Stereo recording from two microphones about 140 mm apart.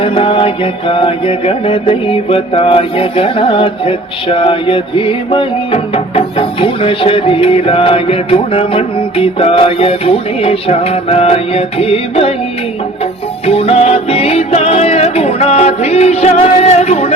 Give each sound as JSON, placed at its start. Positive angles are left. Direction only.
{"t": 0.0, "sound": "music", "side_deg": 40}
{"t": 13.4, "sound": "music", "side_deg": 45}